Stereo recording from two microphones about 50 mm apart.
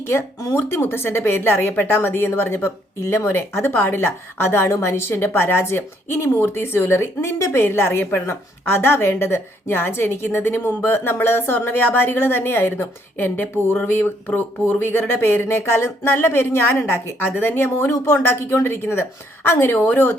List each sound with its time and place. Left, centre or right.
0.1 s a woman's voice: left